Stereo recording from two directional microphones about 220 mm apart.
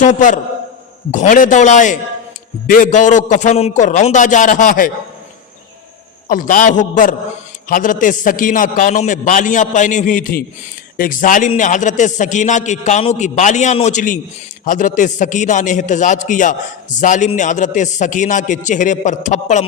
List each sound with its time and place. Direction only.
0.0 s a man's voice: 35° left (ahead or behind)
6.2 s a man's voice: 35° left (ahead or behind)